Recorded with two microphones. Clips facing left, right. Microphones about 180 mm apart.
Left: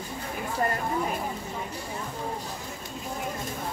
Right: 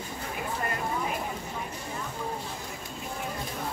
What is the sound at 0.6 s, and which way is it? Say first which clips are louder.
Speech: left 8 dB; 40° left (ahead or behind).